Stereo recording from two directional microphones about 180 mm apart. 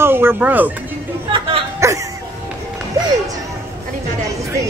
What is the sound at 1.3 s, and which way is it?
Music, 25° right (ahead or behind).